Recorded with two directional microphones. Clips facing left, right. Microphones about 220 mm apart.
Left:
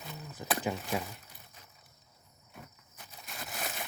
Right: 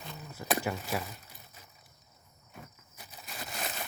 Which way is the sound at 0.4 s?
15° left (ahead or behind).